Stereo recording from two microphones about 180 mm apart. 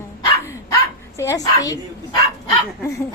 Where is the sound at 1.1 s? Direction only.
15° left (ahead or behind).